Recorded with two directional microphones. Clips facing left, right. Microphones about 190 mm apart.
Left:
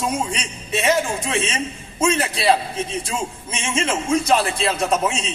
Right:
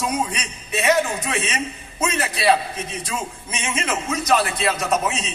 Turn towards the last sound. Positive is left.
turn(degrees=30)  # may be behind; listen again after turning